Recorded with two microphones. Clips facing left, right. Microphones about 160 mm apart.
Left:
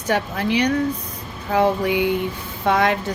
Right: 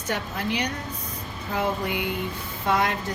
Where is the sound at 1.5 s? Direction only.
90° left.